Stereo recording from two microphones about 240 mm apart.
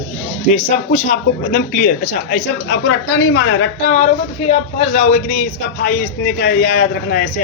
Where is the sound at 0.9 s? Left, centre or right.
Left.